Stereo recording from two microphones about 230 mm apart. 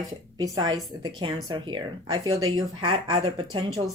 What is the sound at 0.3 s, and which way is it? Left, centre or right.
A woman's voice, centre.